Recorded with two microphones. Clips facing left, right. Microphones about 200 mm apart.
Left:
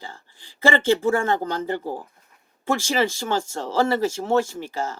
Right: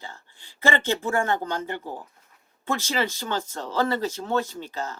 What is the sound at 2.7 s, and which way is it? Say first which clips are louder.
Speech: left 4 dB; 30° left (ahead or behind).